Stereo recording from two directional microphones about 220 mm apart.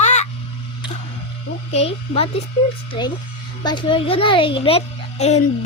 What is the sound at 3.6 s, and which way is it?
A child's voice, 20° left (ahead or behind).